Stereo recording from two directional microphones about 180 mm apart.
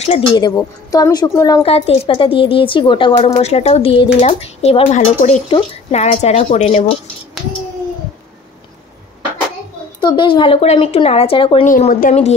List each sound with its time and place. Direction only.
0.0 s a woman's voice: 30° left (ahead or behind)
1.6 s a woman's voice: 35° left (ahead or behind)
9.9 s a woman's voice: 25° left (ahead or behind)
11.6 s speech: 45° left (ahead or behind)